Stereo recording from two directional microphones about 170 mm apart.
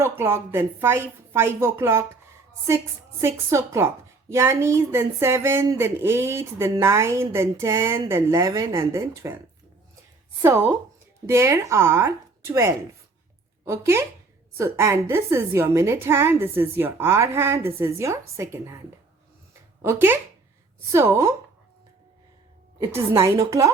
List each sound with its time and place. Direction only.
0.0 s speech: 15° right (ahead or behind)
10.4 s speech: 15° right (ahead or behind)
19.8 s speech: 15° right (ahead or behind)
22.8 s speech: 15° right (ahead or behind)